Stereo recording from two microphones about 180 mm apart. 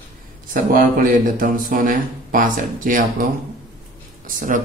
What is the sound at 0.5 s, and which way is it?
Speech, 50° right (ahead or behind).